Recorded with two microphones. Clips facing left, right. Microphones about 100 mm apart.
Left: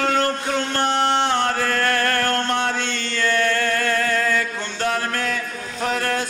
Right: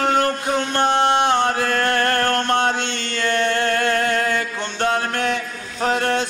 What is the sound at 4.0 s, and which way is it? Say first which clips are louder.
Mantra: right 1 dB; 25° right (ahead or behind).